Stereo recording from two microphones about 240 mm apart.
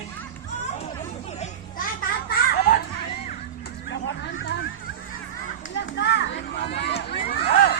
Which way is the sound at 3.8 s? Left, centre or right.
Left.